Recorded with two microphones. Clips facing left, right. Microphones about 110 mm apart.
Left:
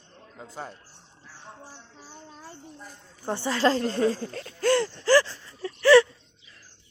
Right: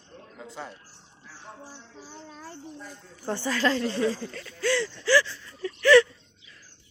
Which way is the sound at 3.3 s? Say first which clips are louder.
Left 2 dB; 25° left (ahead or behind).